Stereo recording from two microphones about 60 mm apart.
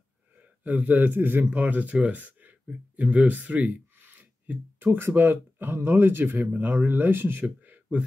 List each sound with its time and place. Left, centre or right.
0.4 s speech: right